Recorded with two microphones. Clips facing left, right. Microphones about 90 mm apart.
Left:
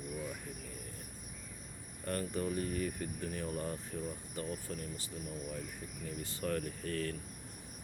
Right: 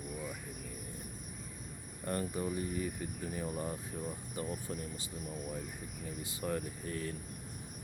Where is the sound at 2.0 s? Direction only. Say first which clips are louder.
Even; 20° right (ahead or behind).